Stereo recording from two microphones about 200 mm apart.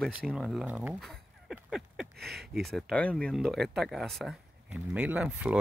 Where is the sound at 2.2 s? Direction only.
55° right (ahead or behind).